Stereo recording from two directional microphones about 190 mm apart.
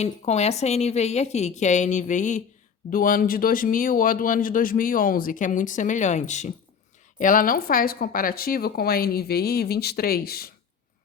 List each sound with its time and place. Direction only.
0.0 s a woman's voice: 35° left (ahead or behind); by 10.5 s 55° left (ahead or behind)